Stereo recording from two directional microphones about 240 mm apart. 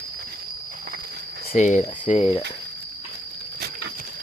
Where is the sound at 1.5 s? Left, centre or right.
Left.